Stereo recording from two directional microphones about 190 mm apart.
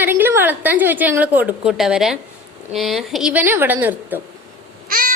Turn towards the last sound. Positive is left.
turn(degrees=-45)  # may be behind; listen again after turning